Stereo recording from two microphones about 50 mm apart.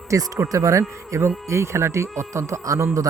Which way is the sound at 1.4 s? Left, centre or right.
Right.